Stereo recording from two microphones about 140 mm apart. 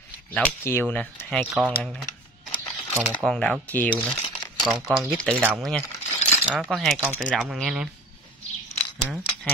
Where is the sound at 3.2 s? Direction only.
5° left (ahead or behind).